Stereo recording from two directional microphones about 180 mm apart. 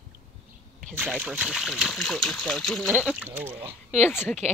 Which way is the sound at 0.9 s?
10° right (ahead or behind).